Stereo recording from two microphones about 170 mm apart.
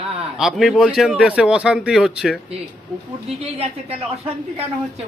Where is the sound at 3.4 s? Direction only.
35° right (ahead or behind).